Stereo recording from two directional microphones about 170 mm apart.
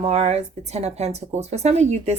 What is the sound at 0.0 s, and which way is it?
A woman's voice, 40° right (ahead or behind).